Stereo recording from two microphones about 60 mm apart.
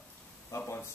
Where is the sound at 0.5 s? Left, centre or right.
Left.